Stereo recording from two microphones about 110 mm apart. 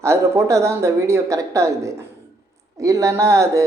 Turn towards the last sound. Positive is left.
turn(degrees=-30)  # may be behind; listen again after turning